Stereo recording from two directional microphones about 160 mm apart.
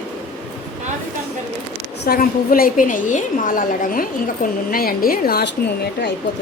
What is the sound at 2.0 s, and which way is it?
A woman's voice, 70° left (ahead or behind).